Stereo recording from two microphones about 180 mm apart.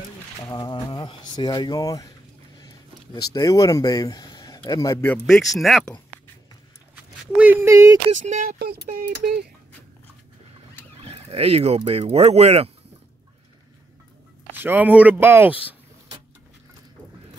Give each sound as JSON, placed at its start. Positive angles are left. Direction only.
{"t": 0.4, "sound": "speech", "side_deg": 20}
{"t": 3.3, "sound": "speech", "side_deg": 20}
{"t": 7.3, "sound": "speech", "side_deg": -10}
{"t": 8.5, "sound": "speech", "side_deg": -60}
{"t": 11.1, "sound": "speech", "side_deg": -35}
{"t": 14.5, "sound": "speech", "side_deg": -10}